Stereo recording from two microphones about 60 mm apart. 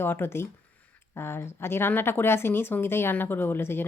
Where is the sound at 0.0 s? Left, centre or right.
Left.